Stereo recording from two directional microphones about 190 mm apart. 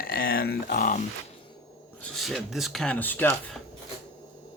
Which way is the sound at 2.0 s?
Centre (ahead or behind).